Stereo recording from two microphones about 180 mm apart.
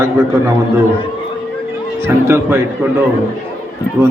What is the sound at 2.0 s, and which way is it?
Speech, 15° right (ahead or behind).